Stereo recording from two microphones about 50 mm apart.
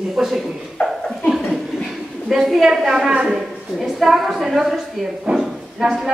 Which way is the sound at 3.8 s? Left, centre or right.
Centre.